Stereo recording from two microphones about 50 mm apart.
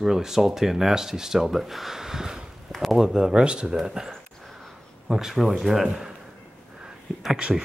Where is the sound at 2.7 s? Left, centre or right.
Centre.